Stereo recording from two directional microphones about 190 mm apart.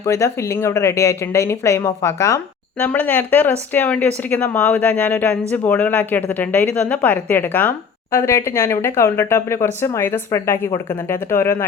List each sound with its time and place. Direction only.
0.0 s speech: 15° left (ahead or behind)